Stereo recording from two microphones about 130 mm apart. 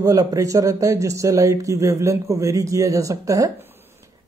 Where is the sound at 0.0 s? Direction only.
25° right (ahead or behind).